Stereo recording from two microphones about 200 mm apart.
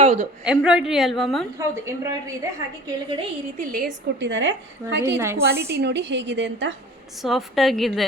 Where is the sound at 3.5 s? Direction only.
45° right (ahead or behind).